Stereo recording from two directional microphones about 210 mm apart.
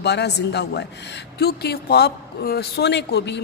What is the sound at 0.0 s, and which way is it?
A woman's voice, 55° left (ahead or behind).